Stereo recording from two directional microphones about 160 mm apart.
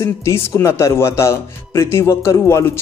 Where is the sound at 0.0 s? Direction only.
15° left (ahead or behind).